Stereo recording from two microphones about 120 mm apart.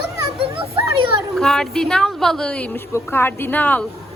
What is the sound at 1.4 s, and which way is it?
A woman's voice, 5° left (ahead or behind).